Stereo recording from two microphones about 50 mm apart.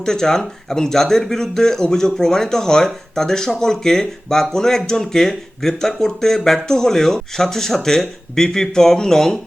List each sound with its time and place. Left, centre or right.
0.0 s speech: centre